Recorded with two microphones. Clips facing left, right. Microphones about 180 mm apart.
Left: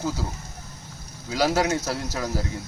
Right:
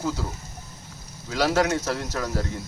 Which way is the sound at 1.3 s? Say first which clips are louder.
Even; 5° left (ahead or behind).